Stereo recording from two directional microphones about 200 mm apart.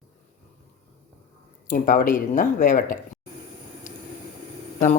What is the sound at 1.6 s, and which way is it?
Speech, 40° left (ahead or behind).